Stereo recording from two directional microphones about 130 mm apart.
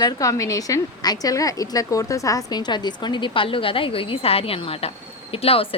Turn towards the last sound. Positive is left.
turn(degrees=45)  # may be behind; listen again after turning